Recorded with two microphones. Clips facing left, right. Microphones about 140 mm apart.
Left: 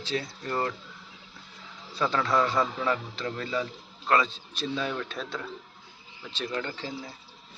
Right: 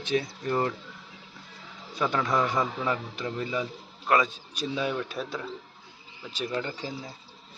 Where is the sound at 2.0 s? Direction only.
15° right (ahead or behind).